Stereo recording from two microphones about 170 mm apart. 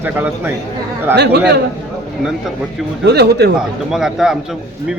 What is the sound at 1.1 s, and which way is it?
Speech, 80° right.